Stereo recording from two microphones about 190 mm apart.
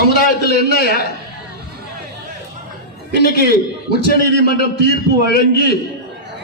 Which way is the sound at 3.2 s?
55° left (ahead or behind).